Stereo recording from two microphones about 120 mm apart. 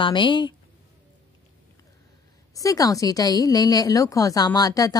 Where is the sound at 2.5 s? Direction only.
30° left (ahead or behind).